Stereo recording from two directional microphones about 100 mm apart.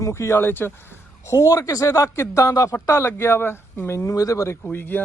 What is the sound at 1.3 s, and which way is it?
Speech, 35° left (ahead or behind).